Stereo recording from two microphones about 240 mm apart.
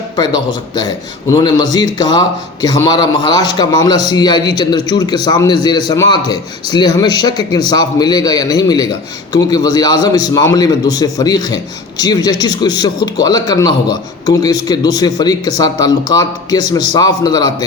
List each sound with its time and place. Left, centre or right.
0.2 s a man's voice: centre